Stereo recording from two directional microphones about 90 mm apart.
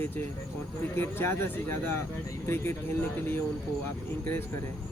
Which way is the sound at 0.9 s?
25° left (ahead or behind).